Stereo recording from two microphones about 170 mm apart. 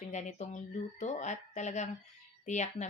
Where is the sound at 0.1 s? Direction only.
45° left (ahead or behind).